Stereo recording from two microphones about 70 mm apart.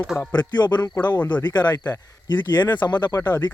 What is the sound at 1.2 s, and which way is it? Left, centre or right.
Speech, left.